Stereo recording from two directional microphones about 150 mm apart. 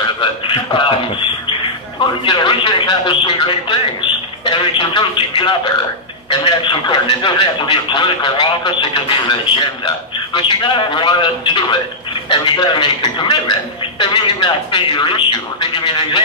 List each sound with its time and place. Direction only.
0.2 s a man's voice: 35° left (ahead or behind)
2.2 s a man's voice: 30° left (ahead or behind)